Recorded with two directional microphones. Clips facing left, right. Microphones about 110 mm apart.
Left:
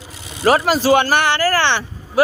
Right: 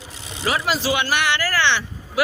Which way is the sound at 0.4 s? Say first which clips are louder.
Left 8 dB; 45° left (ahead or behind).